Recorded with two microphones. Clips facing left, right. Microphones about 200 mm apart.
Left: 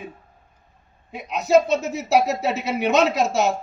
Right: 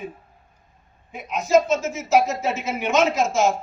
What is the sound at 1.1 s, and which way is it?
Speech, 65° left (ahead or behind).